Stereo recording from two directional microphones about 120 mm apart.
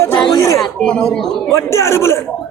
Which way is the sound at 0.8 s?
5° left (ahead or behind).